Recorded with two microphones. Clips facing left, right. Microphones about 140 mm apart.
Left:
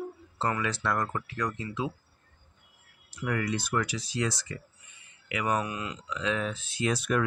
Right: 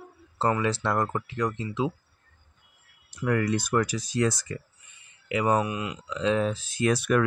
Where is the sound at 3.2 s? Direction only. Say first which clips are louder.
Right 5 dB; 45° right (ahead or behind).